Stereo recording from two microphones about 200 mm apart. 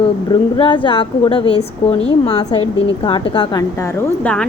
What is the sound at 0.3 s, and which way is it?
A woman's voice, 20° left (ahead or behind).